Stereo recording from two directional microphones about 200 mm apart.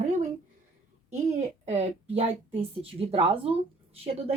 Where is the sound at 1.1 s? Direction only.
35° right (ahead or behind).